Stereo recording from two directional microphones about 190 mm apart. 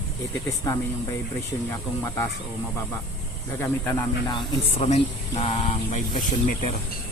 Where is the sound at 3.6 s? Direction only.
20° left (ahead or behind).